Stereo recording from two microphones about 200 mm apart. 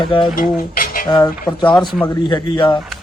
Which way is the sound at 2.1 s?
20° left (ahead or behind).